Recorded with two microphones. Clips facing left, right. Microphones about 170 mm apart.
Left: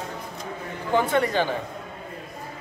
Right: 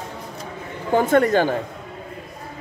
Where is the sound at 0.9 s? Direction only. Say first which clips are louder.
Right 6 dB; 45° right (ahead or behind).